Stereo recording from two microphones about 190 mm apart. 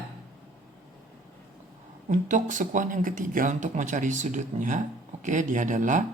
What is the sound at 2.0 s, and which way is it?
Speech, 40° right (ahead or behind).